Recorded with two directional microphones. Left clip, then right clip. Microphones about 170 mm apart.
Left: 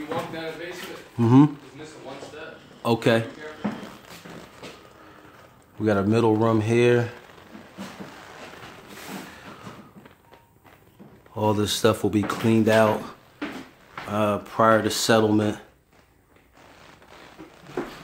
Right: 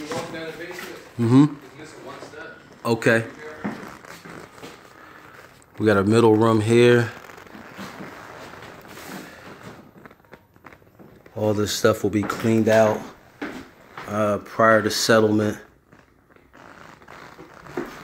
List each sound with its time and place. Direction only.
1.1 s speech: 15° left (ahead or behind)
2.8 s speech: 10° left (ahead or behind)
5.8 s speech: 10° right (ahead or behind)
11.3 s speech: 15° left (ahead or behind)
14.1 s speech: 15° left (ahead or behind)